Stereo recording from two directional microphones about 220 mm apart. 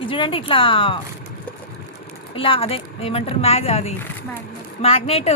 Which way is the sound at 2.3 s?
25° left (ahead or behind).